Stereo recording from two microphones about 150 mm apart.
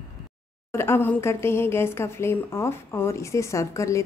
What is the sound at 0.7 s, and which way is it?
Speech, 15° left (ahead or behind).